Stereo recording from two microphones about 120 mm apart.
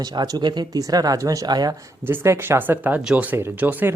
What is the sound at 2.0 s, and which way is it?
Speech, 20° right (ahead or behind).